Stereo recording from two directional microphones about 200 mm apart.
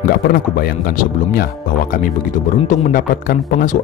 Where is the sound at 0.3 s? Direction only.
45° left (ahead or behind).